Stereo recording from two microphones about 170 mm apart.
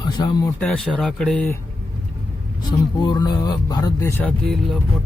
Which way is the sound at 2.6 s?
25° left (ahead or behind).